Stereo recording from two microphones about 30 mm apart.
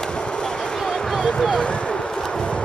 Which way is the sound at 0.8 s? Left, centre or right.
Left.